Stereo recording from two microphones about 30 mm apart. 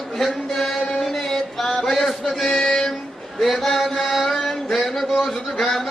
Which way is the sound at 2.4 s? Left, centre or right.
Centre.